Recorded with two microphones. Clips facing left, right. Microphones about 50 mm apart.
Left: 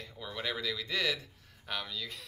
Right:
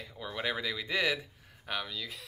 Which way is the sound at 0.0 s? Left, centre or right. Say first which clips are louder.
Right 3 dB; centre.